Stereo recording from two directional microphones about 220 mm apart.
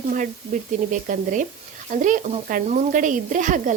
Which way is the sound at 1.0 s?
35° right (ahead or behind).